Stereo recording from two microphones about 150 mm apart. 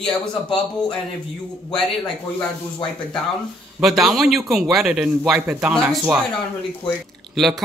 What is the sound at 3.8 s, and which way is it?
Speech, centre (ahead or behind).